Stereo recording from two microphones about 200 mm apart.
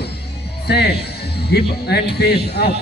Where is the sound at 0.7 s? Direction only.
55° left (ahead or behind).